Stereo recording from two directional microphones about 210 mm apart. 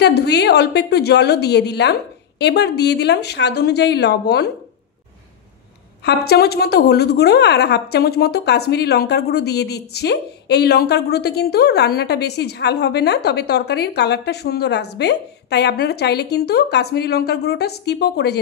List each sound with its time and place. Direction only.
0.0 s a woman's voice: 50° left (ahead or behind)
6.0 s a woman's voice: 50° left (ahead or behind)